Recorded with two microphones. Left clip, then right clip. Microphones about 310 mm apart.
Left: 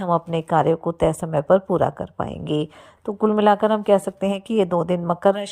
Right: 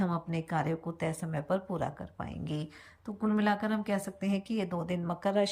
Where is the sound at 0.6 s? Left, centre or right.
Left.